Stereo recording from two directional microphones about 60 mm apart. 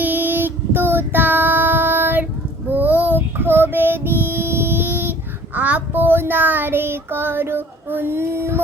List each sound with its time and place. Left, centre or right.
0.0 s child singing: right
5.5 s child singing: right
6.0 s child singing: right